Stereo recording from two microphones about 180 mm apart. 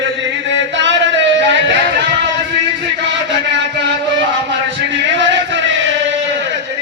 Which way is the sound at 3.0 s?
80° right.